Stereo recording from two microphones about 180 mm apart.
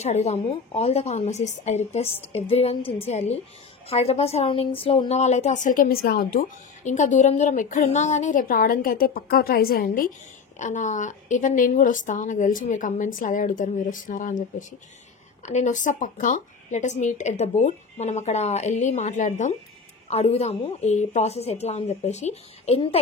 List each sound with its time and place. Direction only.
0.0 s speech: 40° left (ahead or behind); by 6.4 s 55° left (ahead or behind)
6.8 s a woman's voice: 40° left (ahead or behind)
10.6 s a woman's voice: 45° left (ahead or behind)